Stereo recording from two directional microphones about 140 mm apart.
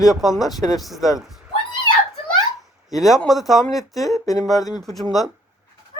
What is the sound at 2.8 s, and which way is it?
Speech, centre (ahead or behind).